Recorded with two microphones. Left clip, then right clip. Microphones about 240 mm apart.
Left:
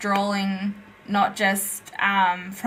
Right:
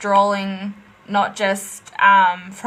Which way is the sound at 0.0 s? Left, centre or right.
Right.